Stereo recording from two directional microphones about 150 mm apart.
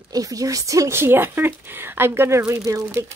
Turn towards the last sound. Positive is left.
turn(degrees=-20)  # may be behind; listen again after turning